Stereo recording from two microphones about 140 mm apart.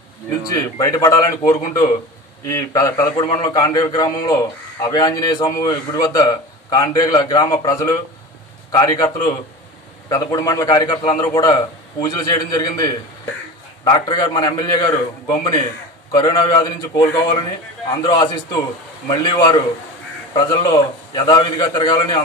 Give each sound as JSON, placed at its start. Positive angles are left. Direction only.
{"t": 0.4, "sound": "a man's voice", "side_deg": 25}
{"t": 3.2, "sound": "a man's voice", "side_deg": 35}
{"t": 3.4, "sound": "a man's voice", "side_deg": 25}